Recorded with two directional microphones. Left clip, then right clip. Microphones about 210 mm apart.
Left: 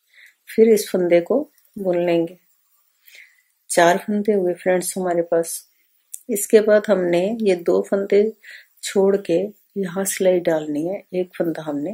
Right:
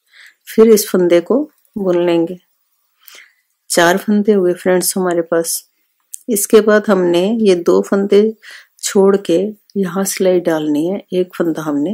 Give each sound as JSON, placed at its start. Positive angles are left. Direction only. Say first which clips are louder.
{"t": 0.1, "sound": "speech", "louder": "right 6 dB", "side_deg": -40}
{"t": 3.7, "sound": "speech", "louder": "right 4 dB", "side_deg": -40}